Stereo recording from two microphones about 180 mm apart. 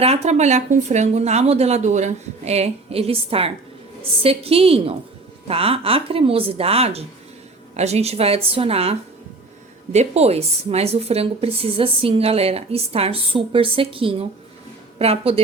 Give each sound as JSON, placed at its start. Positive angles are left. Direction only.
{"t": 0.0, "sound": "a woman's voice", "side_deg": -35}